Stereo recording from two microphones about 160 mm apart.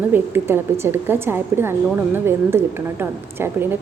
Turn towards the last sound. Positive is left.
turn(degrees=-15)  # may be behind; listen again after turning